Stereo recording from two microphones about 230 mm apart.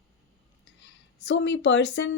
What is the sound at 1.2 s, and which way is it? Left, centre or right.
Speech, left.